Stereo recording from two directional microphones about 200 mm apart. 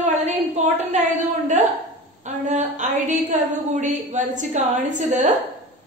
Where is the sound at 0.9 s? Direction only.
35° right (ahead or behind).